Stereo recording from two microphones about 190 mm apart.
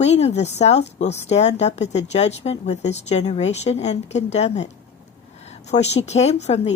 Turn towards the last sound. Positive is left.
turn(degrees=35)  # may be behind; listen again after turning